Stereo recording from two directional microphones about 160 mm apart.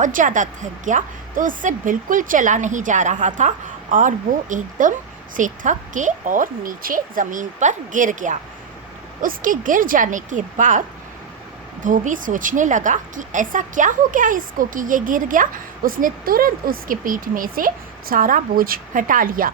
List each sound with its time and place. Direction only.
0.0 s a woman's voice: 55° right (ahead or behind)